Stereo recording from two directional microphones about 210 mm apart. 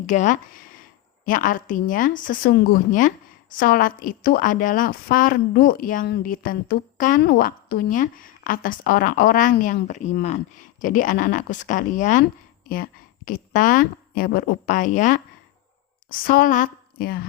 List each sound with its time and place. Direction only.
0.0 s a woman's voice: 35° left (ahead or behind)